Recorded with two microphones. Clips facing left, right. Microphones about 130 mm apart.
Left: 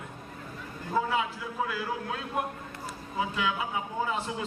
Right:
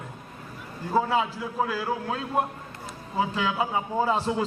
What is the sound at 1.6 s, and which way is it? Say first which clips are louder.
A man's voice: right 4 dB; 30° right (ahead or behind).